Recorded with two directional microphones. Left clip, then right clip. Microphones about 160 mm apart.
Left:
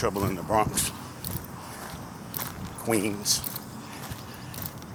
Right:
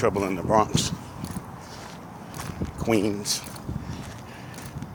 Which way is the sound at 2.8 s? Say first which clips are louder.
Right 2 dB; 50° right (ahead or behind).